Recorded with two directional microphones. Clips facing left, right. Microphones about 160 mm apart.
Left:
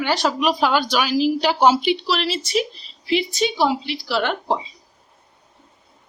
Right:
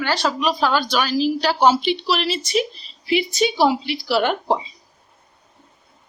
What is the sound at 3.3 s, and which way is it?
A woman's voice, 10° right (ahead or behind).